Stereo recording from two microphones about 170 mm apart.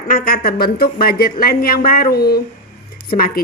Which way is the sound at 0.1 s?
60° left (ahead or behind).